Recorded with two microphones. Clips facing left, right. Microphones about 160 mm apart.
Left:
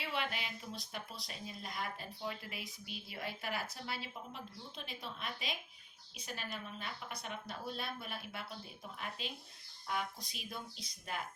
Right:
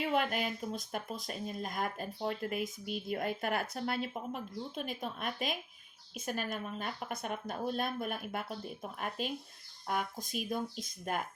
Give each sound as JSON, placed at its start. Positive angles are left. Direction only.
{"t": 0.0, "sound": "speech", "side_deg": -45}